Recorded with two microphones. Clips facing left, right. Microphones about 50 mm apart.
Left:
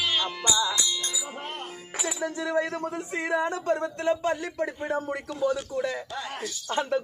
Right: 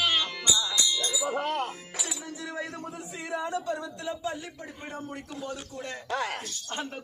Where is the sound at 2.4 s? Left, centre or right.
Left.